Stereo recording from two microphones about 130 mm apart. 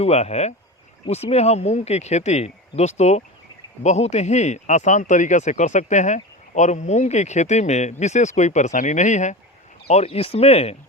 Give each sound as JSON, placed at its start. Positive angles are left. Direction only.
{"t": 0.0, "sound": "speech", "side_deg": 55}
{"t": 9.8, "sound": "speech", "side_deg": 55}